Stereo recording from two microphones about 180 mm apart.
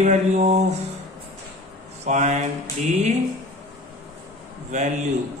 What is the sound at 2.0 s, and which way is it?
Speech, 40° right (ahead or behind).